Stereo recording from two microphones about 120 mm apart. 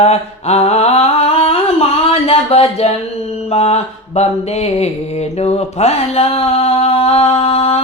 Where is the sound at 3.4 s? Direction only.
60° left (ahead or behind).